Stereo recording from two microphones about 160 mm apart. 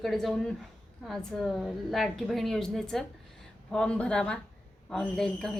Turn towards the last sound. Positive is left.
turn(degrees=5)  # may be behind; listen again after turning